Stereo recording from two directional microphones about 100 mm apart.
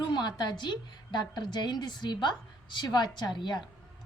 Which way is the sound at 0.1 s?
45° left (ahead or behind).